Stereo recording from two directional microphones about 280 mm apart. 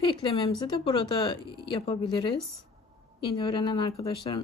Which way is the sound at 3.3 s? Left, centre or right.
Centre.